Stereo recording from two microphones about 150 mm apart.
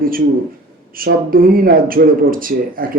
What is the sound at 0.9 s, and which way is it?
A man's voice, 70° right (ahead or behind).